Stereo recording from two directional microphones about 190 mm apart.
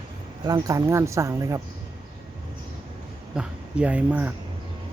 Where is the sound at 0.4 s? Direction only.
20° right (ahead or behind).